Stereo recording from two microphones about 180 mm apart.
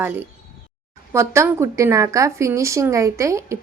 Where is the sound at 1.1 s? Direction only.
15° right (ahead or behind).